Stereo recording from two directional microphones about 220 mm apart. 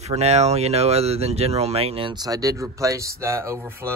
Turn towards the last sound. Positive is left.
turn(degrees=-10)  # may be behind; listen again after turning